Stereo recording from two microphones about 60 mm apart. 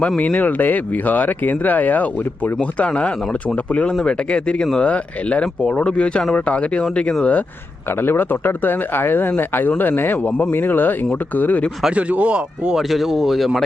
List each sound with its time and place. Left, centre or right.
0.2 s speech: left
8.0 s speech: left
11.9 s speech: right
12.7 s speech: centre